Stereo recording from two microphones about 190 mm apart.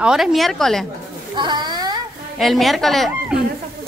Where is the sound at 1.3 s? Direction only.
25° right (ahead or behind).